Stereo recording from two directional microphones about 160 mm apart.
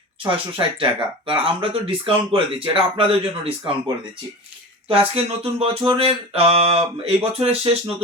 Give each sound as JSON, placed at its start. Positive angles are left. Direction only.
{"t": 0.2, "sound": "speech", "side_deg": -30}
{"t": 3.6, "sound": "speech", "side_deg": -25}
{"t": 4.9, "sound": "speech", "side_deg": -35}